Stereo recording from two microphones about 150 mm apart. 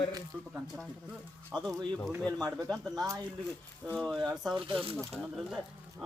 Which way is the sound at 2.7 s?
Centre (ahead or behind).